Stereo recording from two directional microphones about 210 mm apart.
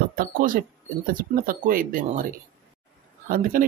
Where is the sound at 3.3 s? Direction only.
45° right (ahead or behind).